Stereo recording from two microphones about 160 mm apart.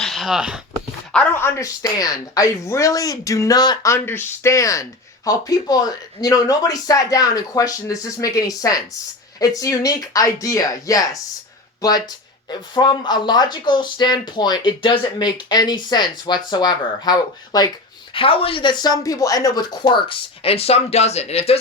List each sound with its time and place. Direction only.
0.0 s speech: centre (ahead or behind)
1.1 s speech: 10° left (ahead or behind); by 21.6 s 40° left (ahead or behind)